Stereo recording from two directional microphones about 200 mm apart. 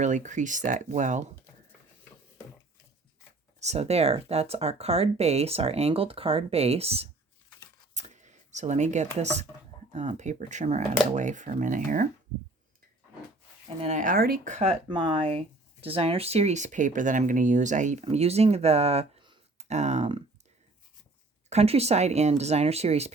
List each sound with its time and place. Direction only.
0.0 s speech: 40° right (ahead or behind)
3.6 s speech: 35° right (ahead or behind)
13.8 s speech: 40° right (ahead or behind)
21.5 s speech: 30° right (ahead or behind)